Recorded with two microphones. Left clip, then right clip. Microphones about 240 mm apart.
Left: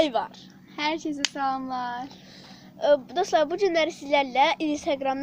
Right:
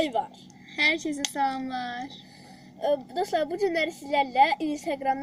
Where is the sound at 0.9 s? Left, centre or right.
Right.